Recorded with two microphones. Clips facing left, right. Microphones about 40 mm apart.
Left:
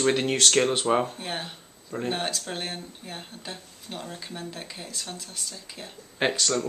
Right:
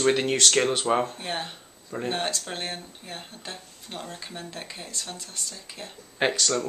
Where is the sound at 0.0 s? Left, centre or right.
Centre.